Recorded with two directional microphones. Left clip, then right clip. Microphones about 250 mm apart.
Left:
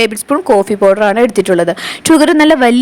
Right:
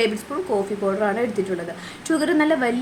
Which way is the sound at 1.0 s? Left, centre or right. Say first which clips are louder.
Left 12 dB; left.